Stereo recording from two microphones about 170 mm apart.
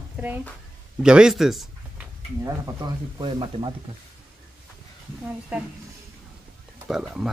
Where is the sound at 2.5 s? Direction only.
20° right (ahead or behind).